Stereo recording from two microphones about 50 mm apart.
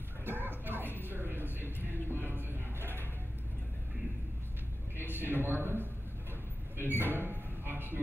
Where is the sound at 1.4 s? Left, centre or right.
Right.